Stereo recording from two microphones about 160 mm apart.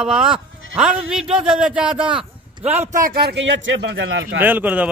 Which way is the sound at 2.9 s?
60° right (ahead or behind).